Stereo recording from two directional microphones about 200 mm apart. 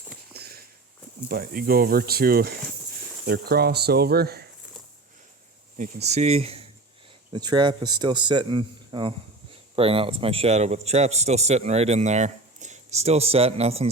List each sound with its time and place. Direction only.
0.3 s a sound: 50° right (ahead or behind)
1.3 s speech: 45° right (ahead or behind)
5.7 s a man's voice: 35° right (ahead or behind)
7.3 s a man's voice: 20° right (ahead or behind)